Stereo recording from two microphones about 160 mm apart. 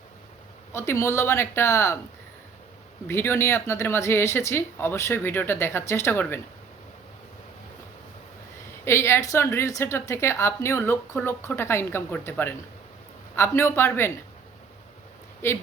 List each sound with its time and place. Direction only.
0.7 s a woman's voice: 15° left (ahead or behind)
3.1 s a woman's voice: 15° left (ahead or behind)
8.8 s a woman's voice: 15° left (ahead or behind)
15.4 s a woman's voice: 15° left (ahead or behind)